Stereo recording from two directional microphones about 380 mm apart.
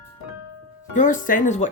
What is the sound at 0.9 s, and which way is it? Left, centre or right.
Speech, left.